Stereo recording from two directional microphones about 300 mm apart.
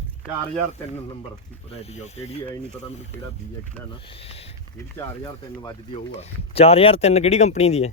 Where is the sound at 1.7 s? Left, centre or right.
Left.